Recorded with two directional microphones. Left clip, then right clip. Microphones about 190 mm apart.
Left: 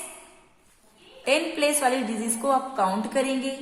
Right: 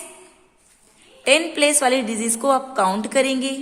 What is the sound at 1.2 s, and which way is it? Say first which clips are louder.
A woman's voice: right 6 dB; 45° right (ahead or behind).